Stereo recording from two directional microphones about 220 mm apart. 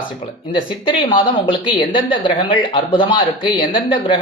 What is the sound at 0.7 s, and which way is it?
A woman's voice, 20° left (ahead or behind).